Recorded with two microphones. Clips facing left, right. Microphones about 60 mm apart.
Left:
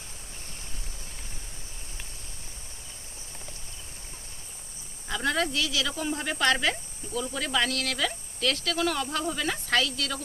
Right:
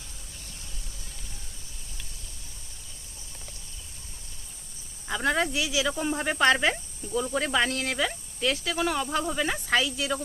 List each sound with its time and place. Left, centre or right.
5.0 s speech: centre